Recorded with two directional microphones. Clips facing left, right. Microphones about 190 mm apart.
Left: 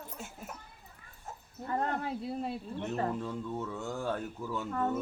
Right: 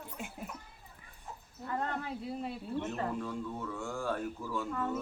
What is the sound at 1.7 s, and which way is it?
Speech, 30° left (ahead or behind).